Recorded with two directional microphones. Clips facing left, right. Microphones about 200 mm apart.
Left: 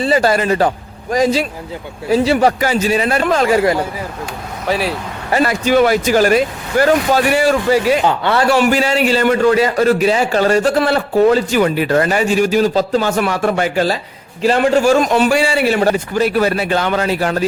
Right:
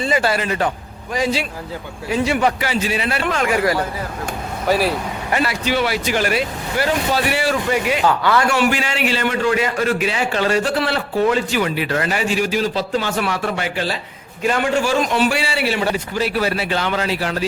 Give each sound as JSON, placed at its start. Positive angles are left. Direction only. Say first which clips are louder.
{"t": 0.0, "sound": "speech", "louder": "left 5 dB", "side_deg": 40}
{"t": 4.6, "sound": "speech", "louder": "right 1 dB", "side_deg": 0}
{"t": 5.3, "sound": "a man's voice", "louder": "left 7 dB", "side_deg": 45}
{"t": 8.0, "sound": "a man's voice", "louder": "left 2 dB", "side_deg": 25}